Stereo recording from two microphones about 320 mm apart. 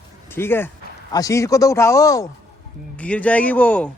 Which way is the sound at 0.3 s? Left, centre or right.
Centre.